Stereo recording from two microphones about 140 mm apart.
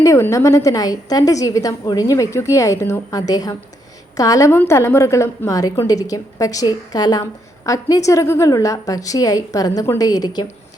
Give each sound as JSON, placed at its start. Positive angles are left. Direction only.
{"t": 0.0, "sound": "a woman's voice", "side_deg": 20}